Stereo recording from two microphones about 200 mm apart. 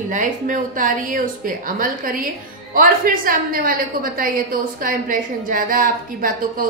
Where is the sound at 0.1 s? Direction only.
40° right (ahead or behind).